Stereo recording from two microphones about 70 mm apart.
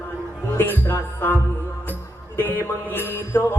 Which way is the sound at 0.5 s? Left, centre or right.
Left.